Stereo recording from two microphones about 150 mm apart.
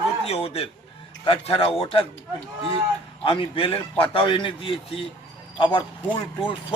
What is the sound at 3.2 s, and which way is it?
A man's voice, 35° left (ahead or behind).